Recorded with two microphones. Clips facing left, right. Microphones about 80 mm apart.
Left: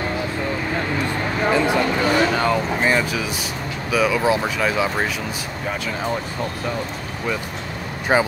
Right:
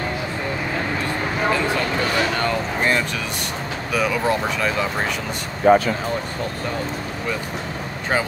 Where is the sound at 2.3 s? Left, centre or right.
Centre.